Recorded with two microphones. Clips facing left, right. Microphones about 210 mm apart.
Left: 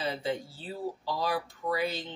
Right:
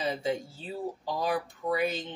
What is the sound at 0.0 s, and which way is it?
Speech, 15° right (ahead or behind).